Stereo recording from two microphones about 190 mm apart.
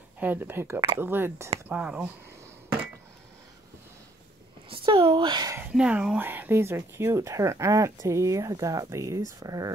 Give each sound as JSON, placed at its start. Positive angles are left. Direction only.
{"t": 0.2, "sound": "speech", "side_deg": -10}
{"t": 4.6, "sound": "speech", "side_deg": -25}